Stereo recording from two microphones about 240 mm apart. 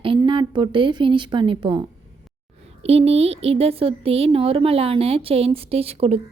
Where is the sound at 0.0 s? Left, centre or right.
Right.